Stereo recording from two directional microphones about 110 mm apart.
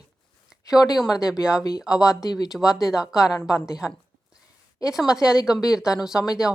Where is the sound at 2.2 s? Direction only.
35° left (ahead or behind).